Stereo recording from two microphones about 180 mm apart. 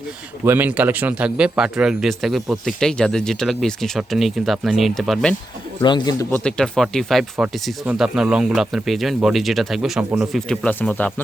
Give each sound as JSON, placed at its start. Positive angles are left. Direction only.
{"t": 0.4, "sound": "a man's voice", "side_deg": -10}
{"t": 5.8, "sound": "speech", "side_deg": 25}
{"t": 6.3, "sound": "a man's voice", "side_deg": 5}
{"t": 10.5, "sound": "speech", "side_deg": 5}